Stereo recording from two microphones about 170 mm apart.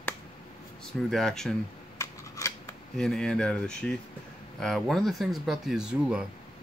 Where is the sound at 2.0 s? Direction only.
15° left (ahead or behind).